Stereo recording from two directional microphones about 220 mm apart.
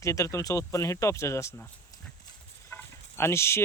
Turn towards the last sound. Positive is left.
turn(degrees=10)  # may be behind; listen again after turning